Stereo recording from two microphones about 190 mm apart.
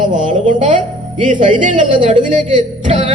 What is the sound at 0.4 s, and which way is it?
Speech, 40° right (ahead or behind).